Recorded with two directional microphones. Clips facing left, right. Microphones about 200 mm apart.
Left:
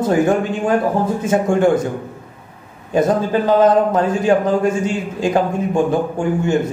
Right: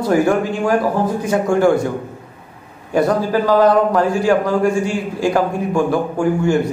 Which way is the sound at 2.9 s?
20° left (ahead or behind).